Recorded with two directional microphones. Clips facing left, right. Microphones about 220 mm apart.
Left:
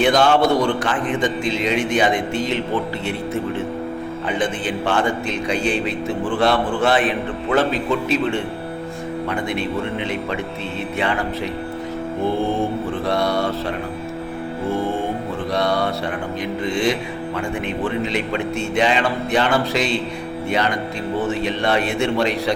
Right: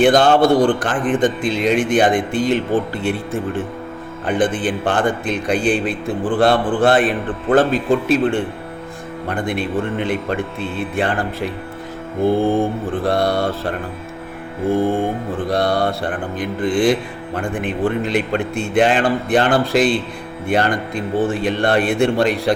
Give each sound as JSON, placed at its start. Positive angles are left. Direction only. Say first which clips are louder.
{"t": 0.1, "sound": "a man's voice", "louder": "right 3 dB", "side_deg": -35}
{"t": 0.6, "sound": "mantra", "louder": "right 4 dB", "side_deg": -50}
{"t": 12.5, "sound": "mantra", "louder": "right 3 dB", "side_deg": -55}